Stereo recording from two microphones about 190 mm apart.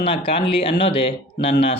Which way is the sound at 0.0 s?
30° left (ahead or behind).